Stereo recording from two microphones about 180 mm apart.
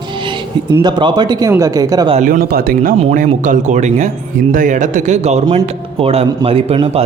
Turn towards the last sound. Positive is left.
turn(degrees=-35)  # may be behind; listen again after turning